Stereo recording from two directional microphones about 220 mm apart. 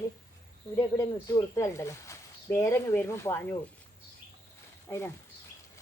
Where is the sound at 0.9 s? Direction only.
15° left (ahead or behind).